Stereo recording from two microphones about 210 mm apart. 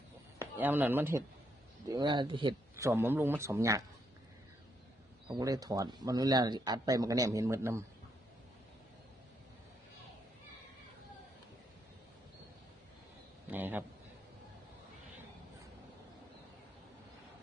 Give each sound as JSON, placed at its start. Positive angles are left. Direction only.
{"t": 0.6, "sound": "speech", "side_deg": -10}
{"t": 1.9, "sound": "speech", "side_deg": -20}
{"t": 5.3, "sound": "speech", "side_deg": -15}
{"t": 13.5, "sound": "a sound", "side_deg": -10}